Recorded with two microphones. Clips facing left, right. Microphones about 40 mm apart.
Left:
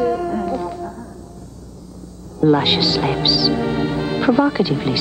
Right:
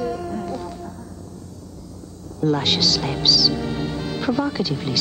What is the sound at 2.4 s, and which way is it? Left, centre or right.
Speech, left.